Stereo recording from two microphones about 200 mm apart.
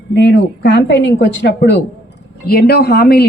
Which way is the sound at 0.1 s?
60° left (ahead or behind).